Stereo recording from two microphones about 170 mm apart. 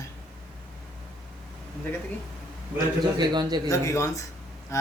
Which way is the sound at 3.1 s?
25° right (ahead or behind).